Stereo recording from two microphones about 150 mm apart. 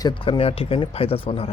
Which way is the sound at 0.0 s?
35° left (ahead or behind).